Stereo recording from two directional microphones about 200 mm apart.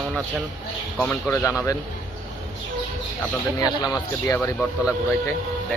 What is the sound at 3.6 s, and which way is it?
Speech, 20° left (ahead or behind).